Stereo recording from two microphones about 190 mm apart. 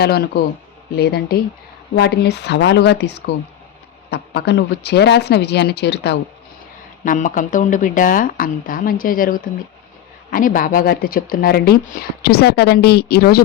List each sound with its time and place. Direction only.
0.0 s speech: 55° left (ahead or behind)
7.0 s speech: 45° left (ahead or behind)